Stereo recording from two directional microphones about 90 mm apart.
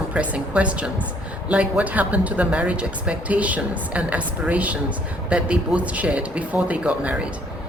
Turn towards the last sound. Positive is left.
turn(degrees=-15)  # may be behind; listen again after turning